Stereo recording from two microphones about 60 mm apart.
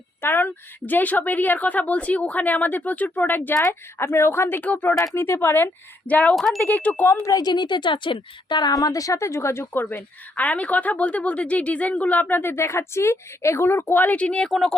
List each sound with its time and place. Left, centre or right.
0.2 s a woman's voice: left
3.5 s speech: left
4.6 s a woman's voice: left
5.1 s speech: left
6.1 s a woman's voice: left
6.3 s speech: centre
6.6 s a woman's voice: left
7.2 s a woman's voice: left
8.7 s a woman's voice: left
13.7 s a woman's voice: left
14.4 s speech: centre